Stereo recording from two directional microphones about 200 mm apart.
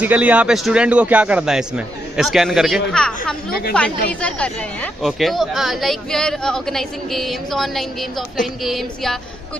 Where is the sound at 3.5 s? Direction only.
50° left (ahead or behind).